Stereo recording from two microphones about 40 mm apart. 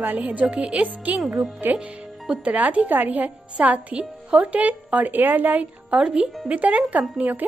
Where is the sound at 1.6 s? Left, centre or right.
Right.